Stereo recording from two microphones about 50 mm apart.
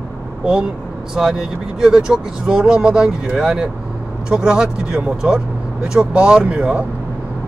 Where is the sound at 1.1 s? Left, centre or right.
Centre.